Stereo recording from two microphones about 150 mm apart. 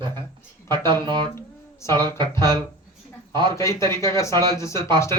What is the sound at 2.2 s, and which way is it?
A man's voice, 30° right (ahead or behind).